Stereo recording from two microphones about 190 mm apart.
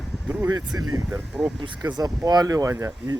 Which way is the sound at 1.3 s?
5° right (ahead or behind).